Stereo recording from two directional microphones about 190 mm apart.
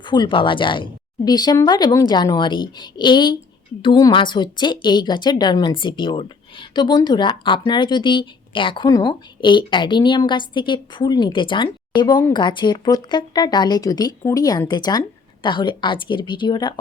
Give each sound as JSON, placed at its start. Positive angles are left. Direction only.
{"t": 0.1, "sound": "a woman's voice", "side_deg": 25}